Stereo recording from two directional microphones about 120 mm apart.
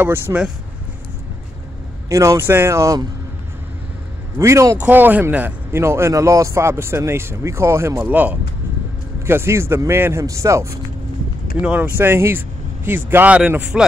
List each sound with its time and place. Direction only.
0.0 s speech: 15° right (ahead or behind)
2.0 s speech: 25° right (ahead or behind)
4.4 s speech: 25° right (ahead or behind)
4.7 s speech: 15° right (ahead or behind)
11.6 s speech: 10° right (ahead or behind)